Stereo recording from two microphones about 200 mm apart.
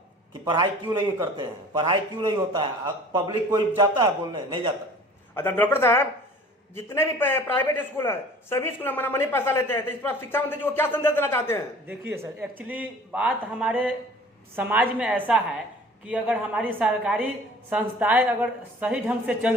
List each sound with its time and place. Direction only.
1.2 s a man's voice: 20° right (ahead or behind)
5.3 s speech: 10° left (ahead or behind)
11.9 s a woman's voice: 10° right (ahead or behind)